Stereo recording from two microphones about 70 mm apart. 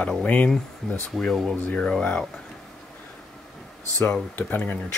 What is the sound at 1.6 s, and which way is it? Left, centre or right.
Speech, centre.